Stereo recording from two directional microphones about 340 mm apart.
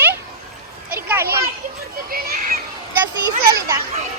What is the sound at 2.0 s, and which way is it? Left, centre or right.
Children playing, right.